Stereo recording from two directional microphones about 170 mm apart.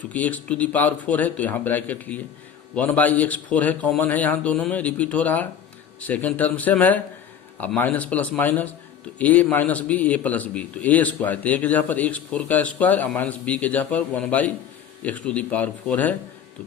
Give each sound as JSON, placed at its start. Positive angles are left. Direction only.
{"t": 0.1, "sound": "a man's voice", "side_deg": 10}